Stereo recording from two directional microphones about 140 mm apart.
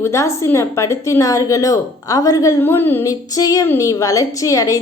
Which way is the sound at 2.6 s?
15° left (ahead or behind).